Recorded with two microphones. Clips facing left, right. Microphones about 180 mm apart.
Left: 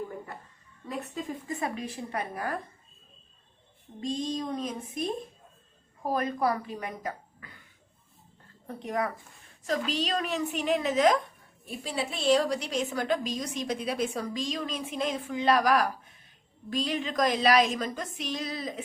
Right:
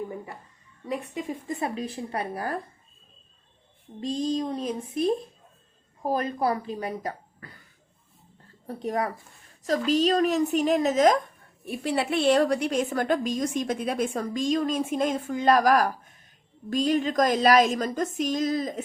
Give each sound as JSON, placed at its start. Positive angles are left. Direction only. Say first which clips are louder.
{"t": 1.5, "sound": "a woman's voice", "louder": "right 2 dB", "side_deg": -30}
{"t": 4.2, "sound": "a woman's voice", "louder": "right 6 dB", "side_deg": -30}
{"t": 8.6, "sound": "a woman's voice", "louder": "right 3 dB", "side_deg": -35}
{"t": 11.6, "sound": "a woman's voice", "louder": "right 6 dB", "side_deg": -65}